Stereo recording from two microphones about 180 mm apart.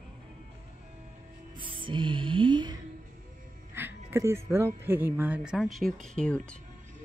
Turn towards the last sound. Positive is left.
turn(degrees=5)  # may be behind; listen again after turning